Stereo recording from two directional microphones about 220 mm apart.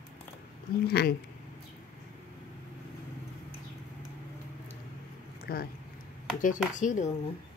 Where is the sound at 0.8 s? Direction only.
45° left (ahead or behind).